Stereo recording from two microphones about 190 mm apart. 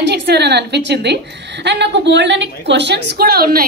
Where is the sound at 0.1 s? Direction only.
60° right (ahead or behind).